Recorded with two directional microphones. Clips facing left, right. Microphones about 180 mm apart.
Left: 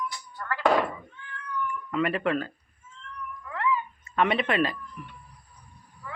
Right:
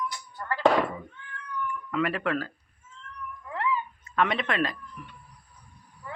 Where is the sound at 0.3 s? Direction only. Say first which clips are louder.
Right 3 dB; 25° right (ahead or behind).